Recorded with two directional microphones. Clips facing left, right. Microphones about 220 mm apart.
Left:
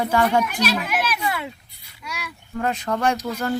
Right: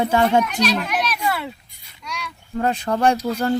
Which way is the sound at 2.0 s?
5° left (ahead or behind).